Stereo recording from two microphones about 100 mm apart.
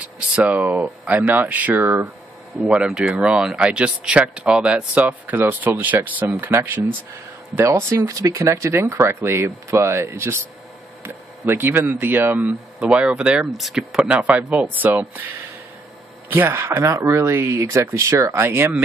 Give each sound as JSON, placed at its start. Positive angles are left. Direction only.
{"t": 0.0, "sound": "speech", "side_deg": -15}
{"t": 16.3, "sound": "speech", "side_deg": -25}